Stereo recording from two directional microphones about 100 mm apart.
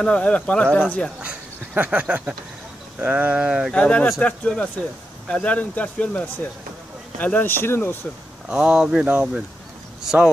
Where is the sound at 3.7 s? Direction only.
10° left (ahead or behind).